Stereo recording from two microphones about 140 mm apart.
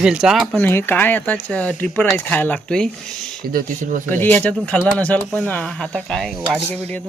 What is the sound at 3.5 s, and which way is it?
Speech, 80° right.